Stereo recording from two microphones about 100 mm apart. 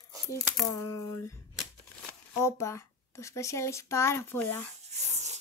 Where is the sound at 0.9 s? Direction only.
35° left (ahead or behind).